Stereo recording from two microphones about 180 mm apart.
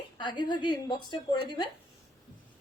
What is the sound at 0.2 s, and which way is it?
A woman's voice, 25° left (ahead or behind).